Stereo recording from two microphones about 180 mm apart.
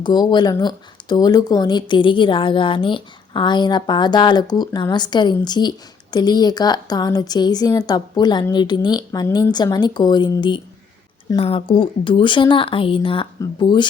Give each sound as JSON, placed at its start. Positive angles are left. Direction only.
{"t": 0.0, "sound": "speech", "side_deg": 25}